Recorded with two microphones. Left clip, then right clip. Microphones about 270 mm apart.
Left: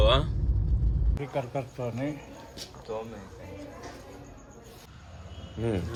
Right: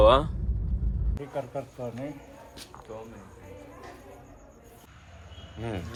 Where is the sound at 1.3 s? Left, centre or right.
Left.